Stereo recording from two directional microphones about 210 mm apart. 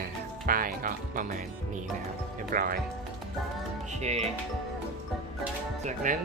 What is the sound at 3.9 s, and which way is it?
Speech, 30° right (ahead or behind).